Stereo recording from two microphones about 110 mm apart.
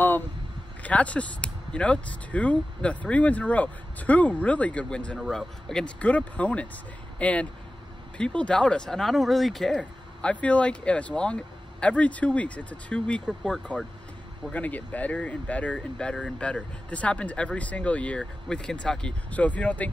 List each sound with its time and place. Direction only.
0.8 s speech: 10° left (ahead or behind)